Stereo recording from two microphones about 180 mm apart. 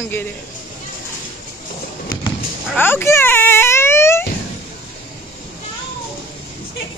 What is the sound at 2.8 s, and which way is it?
Baby cry, 10° left (ahead or behind).